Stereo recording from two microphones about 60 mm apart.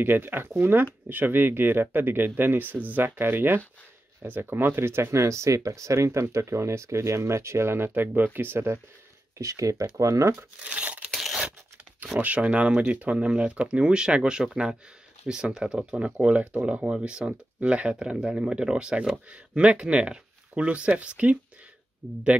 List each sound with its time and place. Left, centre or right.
0.0 s speech: right
9.4 s speech: right
10.6 s tearing: centre
11.1 s a sound: centre
12.2 s speech: right